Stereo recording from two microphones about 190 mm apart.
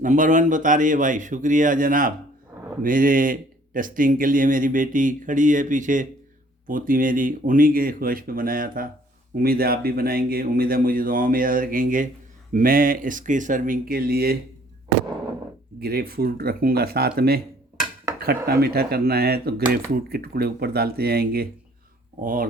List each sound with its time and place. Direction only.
0.0 s speech: 45° right (ahead or behind)
15.8 s speech: 55° right (ahead or behind)
18.4 s speech: 55° right (ahead or behind)